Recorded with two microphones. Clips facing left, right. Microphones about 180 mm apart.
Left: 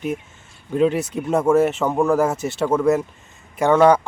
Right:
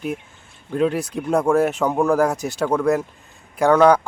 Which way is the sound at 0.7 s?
Centre (ahead or behind).